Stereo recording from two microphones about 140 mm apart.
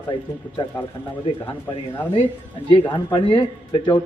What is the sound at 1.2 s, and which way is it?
Speech, 35° left (ahead or behind).